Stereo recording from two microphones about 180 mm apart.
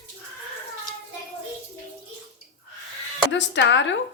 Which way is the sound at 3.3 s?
80° left.